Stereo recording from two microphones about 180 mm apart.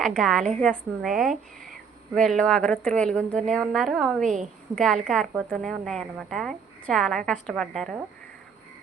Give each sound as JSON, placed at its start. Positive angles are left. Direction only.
{"t": 0.0, "sound": "a woman's voice", "side_deg": 0}